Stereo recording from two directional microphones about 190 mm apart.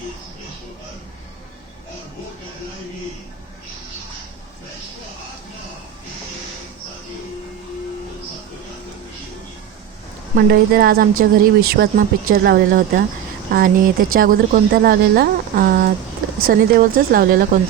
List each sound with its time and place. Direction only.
10.3 s speech: 55° right (ahead or behind)